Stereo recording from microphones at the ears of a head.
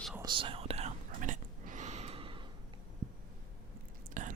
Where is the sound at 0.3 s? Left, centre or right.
Right.